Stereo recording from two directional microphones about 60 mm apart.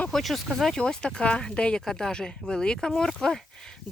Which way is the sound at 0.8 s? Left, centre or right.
Centre.